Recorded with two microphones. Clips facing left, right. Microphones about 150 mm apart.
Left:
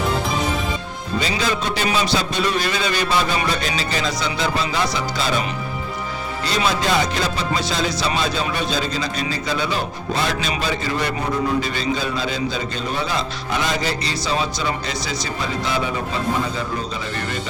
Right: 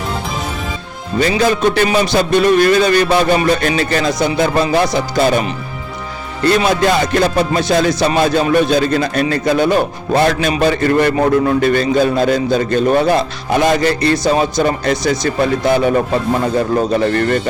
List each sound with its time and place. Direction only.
1.2 s music: 55° right (ahead or behind)
6.4 s music: 55° right (ahead or behind)